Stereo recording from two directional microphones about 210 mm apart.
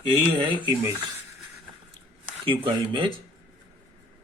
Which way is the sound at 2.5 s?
25° right (ahead or behind).